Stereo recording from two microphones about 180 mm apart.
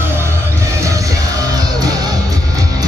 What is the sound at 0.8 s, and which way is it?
Music, 20° right (ahead or behind).